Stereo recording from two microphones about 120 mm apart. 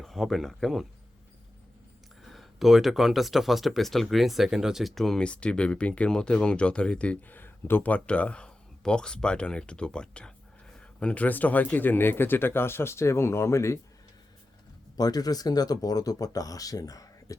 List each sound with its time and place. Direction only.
0.0 s speech: centre (ahead or behind)
2.3 s speech: centre (ahead or behind); by 13.7 s 25° left (ahead or behind)
14.9 s speech: 35° left (ahead or behind)